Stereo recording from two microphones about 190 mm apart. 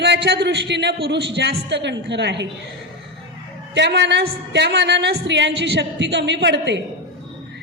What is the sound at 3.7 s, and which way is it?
A woman's voice, 65° right (ahead or behind).